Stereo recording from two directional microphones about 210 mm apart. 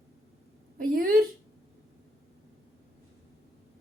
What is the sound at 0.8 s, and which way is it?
Speech, 45° right (ahead or behind).